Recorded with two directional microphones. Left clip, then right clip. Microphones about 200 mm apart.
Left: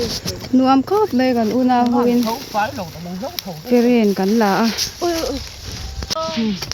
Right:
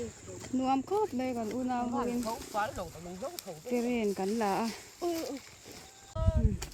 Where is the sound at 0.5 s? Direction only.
20° left (ahead or behind).